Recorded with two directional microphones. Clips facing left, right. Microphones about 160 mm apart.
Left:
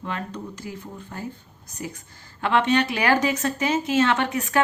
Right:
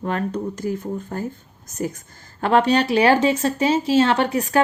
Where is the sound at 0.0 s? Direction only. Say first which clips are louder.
Right 8 dB; 45° right (ahead or behind).